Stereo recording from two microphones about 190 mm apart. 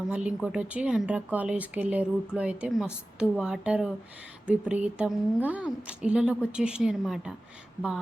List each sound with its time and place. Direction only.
0.1 s a woman's voice: 5° right (ahead or behind)